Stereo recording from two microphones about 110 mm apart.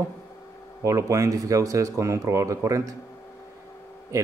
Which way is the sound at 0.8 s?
30° right (ahead or behind).